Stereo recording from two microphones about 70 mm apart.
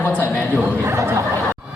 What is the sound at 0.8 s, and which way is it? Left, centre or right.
Speech, right.